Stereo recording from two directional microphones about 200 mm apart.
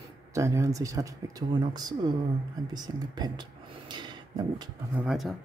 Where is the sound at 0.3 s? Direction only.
15° right (ahead or behind).